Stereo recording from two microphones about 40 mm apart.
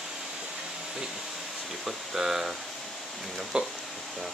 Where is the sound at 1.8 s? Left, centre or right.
Centre.